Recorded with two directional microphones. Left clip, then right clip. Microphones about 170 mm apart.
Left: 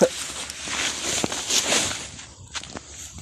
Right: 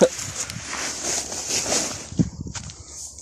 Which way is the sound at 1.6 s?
5° left (ahead or behind).